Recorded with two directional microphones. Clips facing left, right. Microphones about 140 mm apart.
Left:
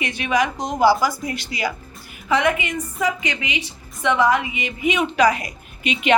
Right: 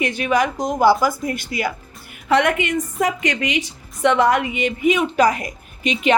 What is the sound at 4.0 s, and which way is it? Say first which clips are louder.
Speech: right 2 dB; 65° right (ahead or behind).